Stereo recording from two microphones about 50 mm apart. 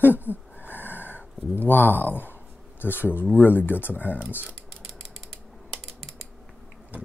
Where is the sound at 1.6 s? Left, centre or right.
Left.